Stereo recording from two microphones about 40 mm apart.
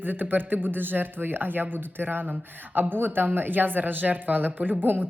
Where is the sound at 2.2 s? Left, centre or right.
Right.